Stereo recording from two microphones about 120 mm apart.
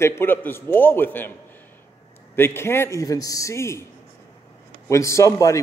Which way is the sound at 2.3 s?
20° left (ahead or behind).